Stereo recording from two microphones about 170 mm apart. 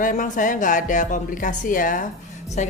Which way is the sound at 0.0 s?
50° left (ahead or behind).